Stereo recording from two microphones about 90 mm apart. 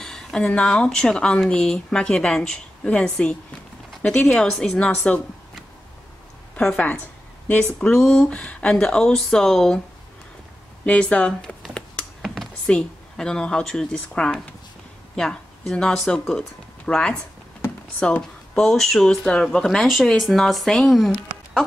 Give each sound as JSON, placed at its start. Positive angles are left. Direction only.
{"t": 0.0, "sound": "speech", "side_deg": 5}
{"t": 4.4, "sound": "speech", "side_deg": 5}
{"t": 6.5, "sound": "speech", "side_deg": 15}
{"t": 10.9, "sound": "speech", "side_deg": 10}
{"t": 12.2, "sound": "a sound", "side_deg": 5}
{"t": 12.7, "sound": "speech", "side_deg": 10}
{"t": 17.6, "sound": "speech", "side_deg": 20}